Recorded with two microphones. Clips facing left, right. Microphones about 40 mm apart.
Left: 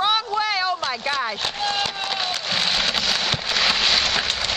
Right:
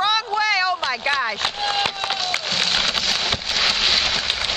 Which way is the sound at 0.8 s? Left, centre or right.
Centre.